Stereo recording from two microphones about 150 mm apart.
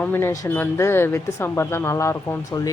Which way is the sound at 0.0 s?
15° left (ahead or behind).